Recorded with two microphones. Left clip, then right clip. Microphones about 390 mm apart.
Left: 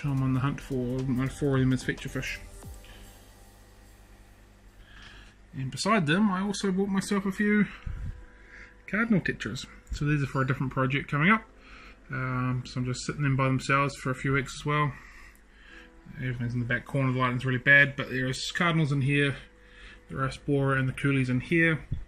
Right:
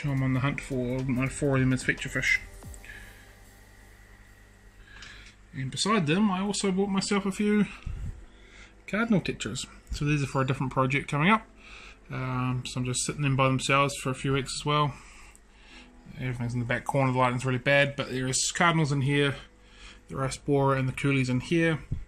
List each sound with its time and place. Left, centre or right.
0.0 s speech: centre
5.6 s speech: centre
8.5 s a sound: centre
9.1 s speech: centre
15.7 s music: centre
17.0 s speech: centre
20.6 s speech: centre